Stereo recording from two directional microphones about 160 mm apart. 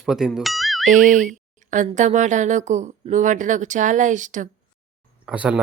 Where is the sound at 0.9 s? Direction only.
50° right (ahead or behind).